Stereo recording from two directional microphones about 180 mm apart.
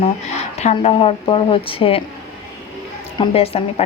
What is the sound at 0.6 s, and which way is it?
A woman's voice, 35° left (ahead or behind).